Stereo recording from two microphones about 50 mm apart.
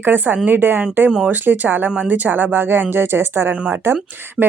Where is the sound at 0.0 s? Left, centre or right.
Right.